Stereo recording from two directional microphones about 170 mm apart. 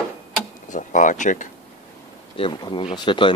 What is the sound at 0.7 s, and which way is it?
Speech, 50° left (ahead or behind).